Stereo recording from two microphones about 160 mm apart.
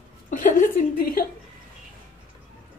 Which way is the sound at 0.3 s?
55° left (ahead or behind).